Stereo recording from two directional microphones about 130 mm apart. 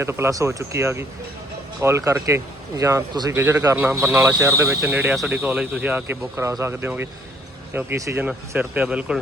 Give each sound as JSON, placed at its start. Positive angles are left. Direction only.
{"t": 0.0, "sound": "a man's voice", "side_deg": -20}
{"t": 8.2, "sound": "speech", "side_deg": -10}